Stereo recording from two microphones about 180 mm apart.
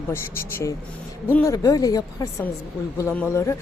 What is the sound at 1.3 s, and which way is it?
A woman's voice, 15° left (ahead or behind).